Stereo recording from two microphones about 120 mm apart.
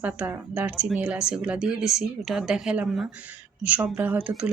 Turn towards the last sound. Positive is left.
turn(degrees=-10)  # may be behind; listen again after turning